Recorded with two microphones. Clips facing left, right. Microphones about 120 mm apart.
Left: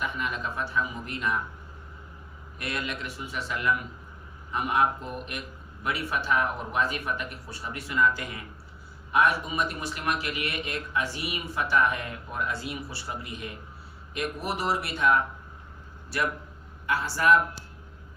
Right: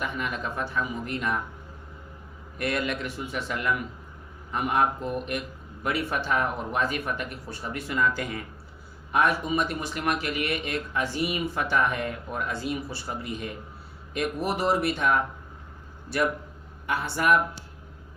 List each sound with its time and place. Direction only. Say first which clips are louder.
0.0 s a man's voice: right 1 dB; 50° right (ahead or behind)
2.6 s a man's voice: right 5 dB; 50° right (ahead or behind)
17.0 s speech: left 1 dB; 60° right (ahead or behind)